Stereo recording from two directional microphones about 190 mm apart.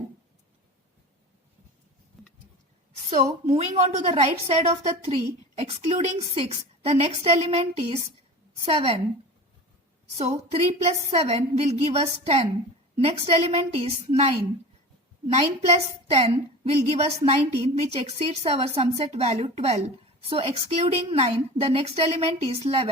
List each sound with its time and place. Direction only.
3.4 s a woman's voice: 35° right (ahead or behind)
10.2 s a woman's voice: 35° right (ahead or behind)
15.6 s a woman's voice: 30° right (ahead or behind)